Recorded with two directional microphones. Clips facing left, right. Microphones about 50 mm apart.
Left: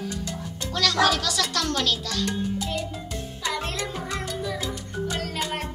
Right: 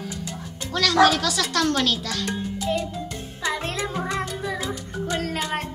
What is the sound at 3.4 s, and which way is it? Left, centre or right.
Music for children, right.